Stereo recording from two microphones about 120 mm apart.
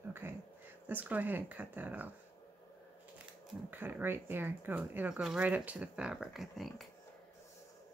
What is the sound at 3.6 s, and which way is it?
Speech, 15° right (ahead or behind).